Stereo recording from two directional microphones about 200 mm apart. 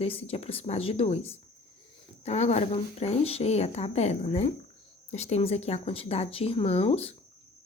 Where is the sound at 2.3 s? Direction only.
35° left (ahead or behind).